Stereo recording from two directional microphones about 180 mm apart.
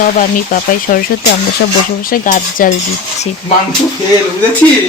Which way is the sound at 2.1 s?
50° left (ahead or behind).